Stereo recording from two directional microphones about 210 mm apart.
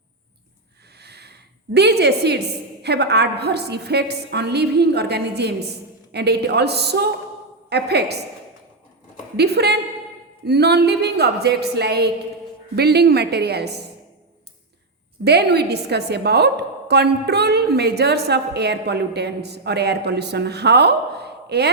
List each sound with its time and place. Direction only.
0.9 s a sound: 50° right (ahead or behind)
2.8 s a woman's voice: 50° right (ahead or behind)
9.3 s a woman's voice: 50° right (ahead or behind)
15.2 s a woman's voice: 50° right (ahead or behind)